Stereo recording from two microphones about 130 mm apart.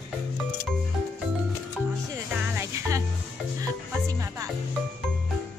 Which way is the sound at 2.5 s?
25° right (ahead or behind).